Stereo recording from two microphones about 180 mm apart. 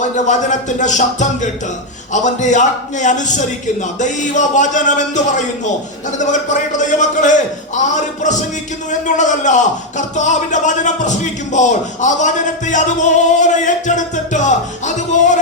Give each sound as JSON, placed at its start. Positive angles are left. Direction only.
{"t": 0.3, "sound": "a man's voice", "side_deg": 45}